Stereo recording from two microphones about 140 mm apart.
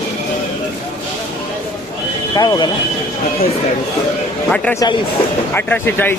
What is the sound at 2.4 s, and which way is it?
Speech, 30° left (ahead or behind).